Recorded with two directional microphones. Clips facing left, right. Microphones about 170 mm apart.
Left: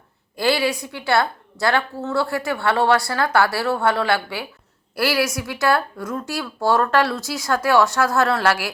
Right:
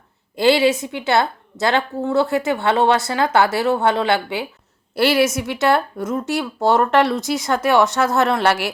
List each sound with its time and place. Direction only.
0.3 s a woman's voice: 25° right (ahead or behind)